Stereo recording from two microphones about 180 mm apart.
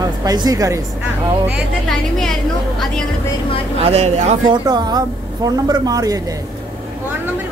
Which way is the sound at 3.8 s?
35° right (ahead or behind).